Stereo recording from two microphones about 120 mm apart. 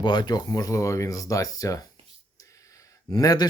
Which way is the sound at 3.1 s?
30° left (ahead or behind).